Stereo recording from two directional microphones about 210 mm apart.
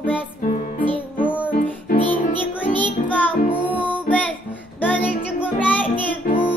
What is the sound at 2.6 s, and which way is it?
Music, 10° left (ahead or behind).